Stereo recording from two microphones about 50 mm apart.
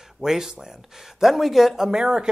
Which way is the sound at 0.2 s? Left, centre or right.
Centre.